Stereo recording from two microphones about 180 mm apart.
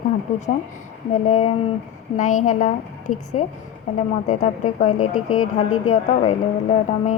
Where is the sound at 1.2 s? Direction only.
40° left (ahead or behind).